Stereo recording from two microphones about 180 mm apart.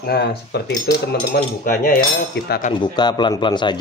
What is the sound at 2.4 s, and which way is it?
Speech, 70° left (ahead or behind).